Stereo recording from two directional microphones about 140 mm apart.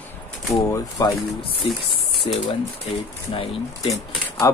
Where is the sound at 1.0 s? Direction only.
25° left (ahead or behind).